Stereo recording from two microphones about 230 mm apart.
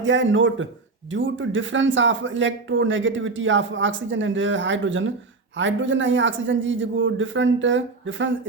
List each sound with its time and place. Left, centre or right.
0.0 s speech: right